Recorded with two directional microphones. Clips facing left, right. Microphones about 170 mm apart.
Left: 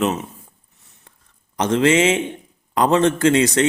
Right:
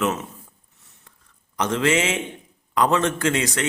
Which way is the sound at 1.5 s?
25° left (ahead or behind).